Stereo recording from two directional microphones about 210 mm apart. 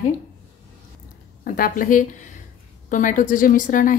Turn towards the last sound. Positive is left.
turn(degrees=40)  # may be behind; listen again after turning